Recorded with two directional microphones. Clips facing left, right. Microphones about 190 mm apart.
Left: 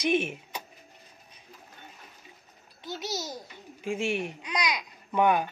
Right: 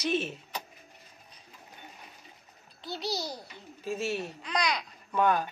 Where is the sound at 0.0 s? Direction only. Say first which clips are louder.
Left 4 dB; 15° left (ahead or behind).